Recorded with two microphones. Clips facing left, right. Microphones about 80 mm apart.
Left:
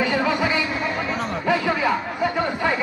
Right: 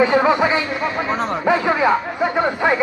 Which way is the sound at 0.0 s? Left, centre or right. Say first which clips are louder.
Right 6 dB; right.